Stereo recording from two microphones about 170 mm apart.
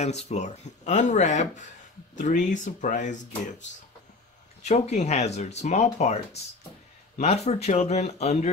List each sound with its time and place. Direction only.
0.0 s speech: 40° left (ahead or behind)
4.6 s speech: 40° left (ahead or behind)
7.2 s speech: 40° left (ahead or behind)